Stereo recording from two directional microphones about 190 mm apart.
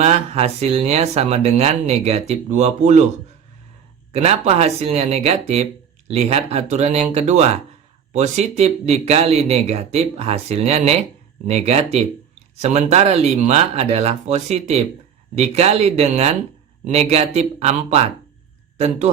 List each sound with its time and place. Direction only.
0.0 s speech: 35° right (ahead or behind)
4.1 s speech: 35° right (ahead or behind)